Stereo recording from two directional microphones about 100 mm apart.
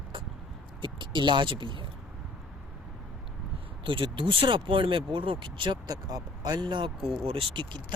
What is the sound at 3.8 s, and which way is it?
Speech, 55° right (ahead or behind).